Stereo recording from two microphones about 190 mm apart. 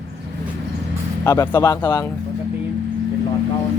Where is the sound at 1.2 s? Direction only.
15° left (ahead or behind).